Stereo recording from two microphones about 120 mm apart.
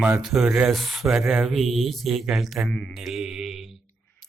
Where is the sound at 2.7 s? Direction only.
15° left (ahead or behind).